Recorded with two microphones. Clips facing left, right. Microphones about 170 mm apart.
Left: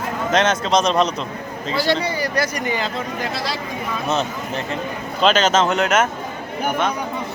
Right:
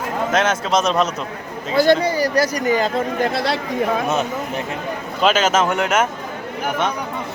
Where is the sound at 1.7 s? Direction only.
50° right (ahead or behind).